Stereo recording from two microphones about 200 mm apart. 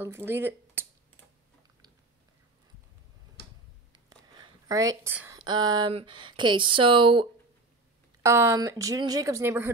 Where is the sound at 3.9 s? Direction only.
20° right (ahead or behind).